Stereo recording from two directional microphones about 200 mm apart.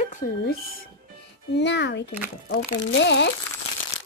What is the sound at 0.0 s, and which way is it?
Speech, 40° left (ahead or behind).